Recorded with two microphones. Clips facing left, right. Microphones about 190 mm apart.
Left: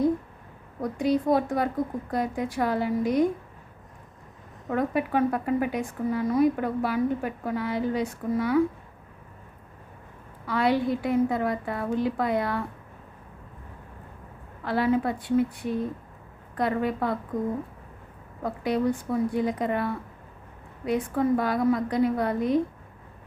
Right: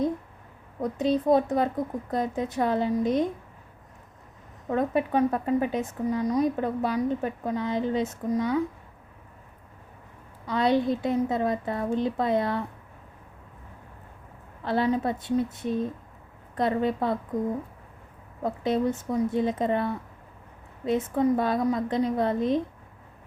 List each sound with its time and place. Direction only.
0.8 s a woman's voice: 20° right (ahead or behind)
4.7 s a woman's voice: 25° right (ahead or behind)
10.4 s a woman's voice: 20° right (ahead or behind)
14.6 s a woman's voice: 25° right (ahead or behind)
18.4 s a woman's voice: 25° right (ahead or behind)